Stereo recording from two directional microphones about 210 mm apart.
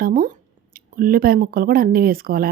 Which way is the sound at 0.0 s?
40° right (ahead or behind).